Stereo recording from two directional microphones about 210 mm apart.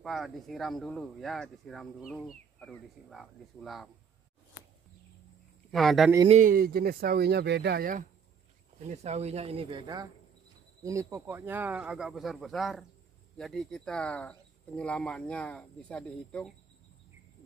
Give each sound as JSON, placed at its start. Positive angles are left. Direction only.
{"t": 0.0, "sound": "speech", "side_deg": 0}
{"t": 5.7, "sound": "speech", "side_deg": 0}
{"t": 6.2, "sound": "speech", "side_deg": -35}